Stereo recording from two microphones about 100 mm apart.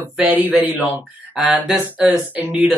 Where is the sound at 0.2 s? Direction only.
15° right (ahead or behind).